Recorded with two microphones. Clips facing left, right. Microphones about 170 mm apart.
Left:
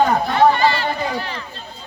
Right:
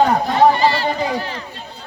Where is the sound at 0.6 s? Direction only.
35° right (ahead or behind).